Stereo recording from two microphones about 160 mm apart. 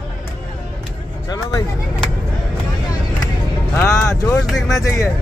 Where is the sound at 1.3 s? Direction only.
20° left (ahead or behind).